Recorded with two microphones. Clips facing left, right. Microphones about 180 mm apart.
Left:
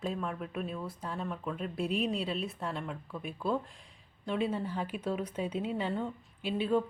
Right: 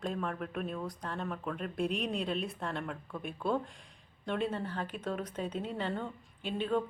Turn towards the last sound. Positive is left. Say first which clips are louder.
# left 3 dB
turn(degrees=10)  # may be behind; listen again after turning